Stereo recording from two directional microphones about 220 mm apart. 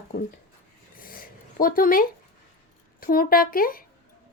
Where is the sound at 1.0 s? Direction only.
40° left (ahead or behind).